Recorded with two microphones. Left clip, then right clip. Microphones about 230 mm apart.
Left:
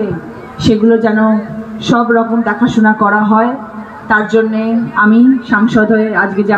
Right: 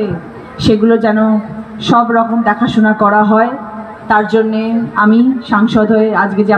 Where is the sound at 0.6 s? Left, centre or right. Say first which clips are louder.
Even; right.